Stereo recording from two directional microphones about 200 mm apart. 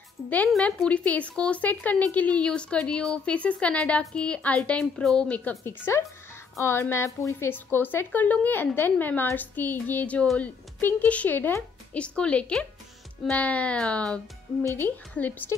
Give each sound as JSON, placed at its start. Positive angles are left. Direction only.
{"t": 0.3, "sound": "a woman's voice", "side_deg": 5}